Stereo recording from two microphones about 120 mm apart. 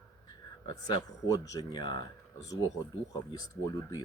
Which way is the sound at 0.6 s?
35° left (ahead or behind).